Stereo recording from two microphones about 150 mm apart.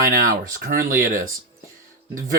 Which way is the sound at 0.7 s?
70° right (ahead or behind).